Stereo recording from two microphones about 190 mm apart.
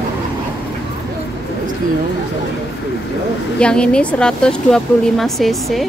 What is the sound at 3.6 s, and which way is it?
Speech, 5° left (ahead or behind).